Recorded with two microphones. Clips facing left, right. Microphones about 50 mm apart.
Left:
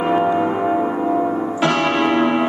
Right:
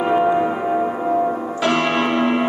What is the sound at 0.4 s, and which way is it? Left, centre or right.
Gong, centre.